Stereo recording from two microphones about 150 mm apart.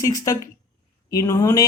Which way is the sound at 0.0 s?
25° left (ahead or behind).